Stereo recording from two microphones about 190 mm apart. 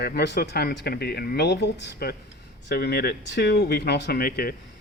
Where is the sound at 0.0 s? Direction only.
55° left (ahead or behind).